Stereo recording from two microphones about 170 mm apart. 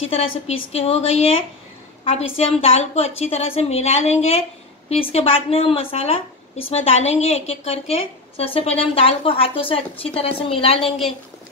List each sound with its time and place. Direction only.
0.0 s a woman's voice: 35° left (ahead or behind)